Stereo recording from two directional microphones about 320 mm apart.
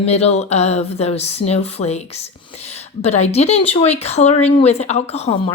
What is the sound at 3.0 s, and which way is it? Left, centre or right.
Speech, centre.